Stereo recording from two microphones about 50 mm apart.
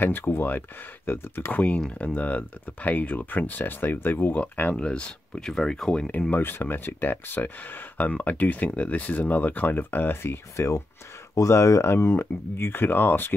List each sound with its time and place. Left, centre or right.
0.0 s speech: left
1.5 s speech: left
1.9 s speech: left
2.1 s speech: left
4.7 s speech: left
5.5 s speech: centre
6.3 s speech: left
10.5 s speech: left
11.3 s speech: left